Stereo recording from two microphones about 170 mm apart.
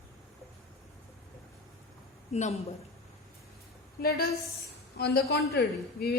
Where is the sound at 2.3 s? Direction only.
40° left (ahead or behind).